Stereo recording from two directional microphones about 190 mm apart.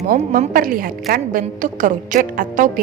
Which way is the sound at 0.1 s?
45° right (ahead or behind).